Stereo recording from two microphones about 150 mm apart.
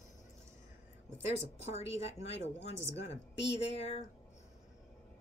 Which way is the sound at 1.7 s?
45° left (ahead or behind).